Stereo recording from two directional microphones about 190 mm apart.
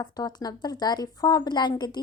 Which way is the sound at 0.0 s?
20° left (ahead or behind).